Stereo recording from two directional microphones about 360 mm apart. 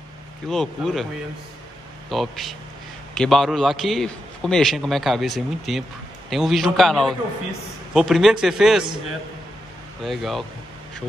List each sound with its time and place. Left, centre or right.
0.5 s a man's voice: centre
2.0 s a man's voice: centre
10.0 s a man's voice: centre